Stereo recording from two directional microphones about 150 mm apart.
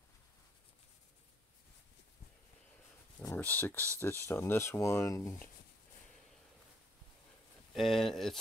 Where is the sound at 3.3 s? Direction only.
10° left (ahead or behind).